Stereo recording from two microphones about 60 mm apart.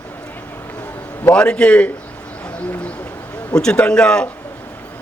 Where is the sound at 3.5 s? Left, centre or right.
Centre.